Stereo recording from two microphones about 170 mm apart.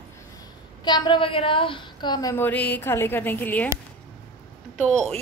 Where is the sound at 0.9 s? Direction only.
25° left (ahead or behind); by 3.6 s 10° left (ahead or behind).